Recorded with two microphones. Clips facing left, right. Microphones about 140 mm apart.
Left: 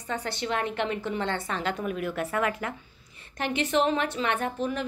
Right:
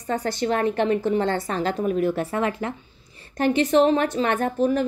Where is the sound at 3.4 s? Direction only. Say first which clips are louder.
Right 7 dB; 40° right (ahead or behind).